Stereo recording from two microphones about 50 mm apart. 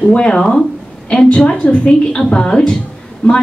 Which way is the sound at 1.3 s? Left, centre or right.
Left.